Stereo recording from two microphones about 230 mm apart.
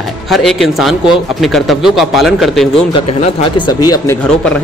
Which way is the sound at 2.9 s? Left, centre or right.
Left.